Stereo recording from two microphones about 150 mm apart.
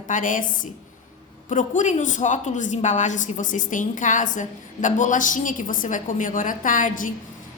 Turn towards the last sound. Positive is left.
turn(degrees=65)  # may be behind; listen again after turning